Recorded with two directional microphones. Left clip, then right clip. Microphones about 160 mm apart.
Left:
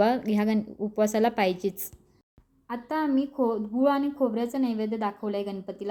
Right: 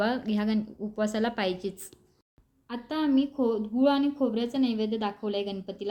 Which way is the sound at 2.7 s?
20° left (ahead or behind).